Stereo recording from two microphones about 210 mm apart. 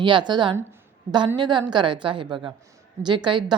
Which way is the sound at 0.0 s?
20° right (ahead or behind).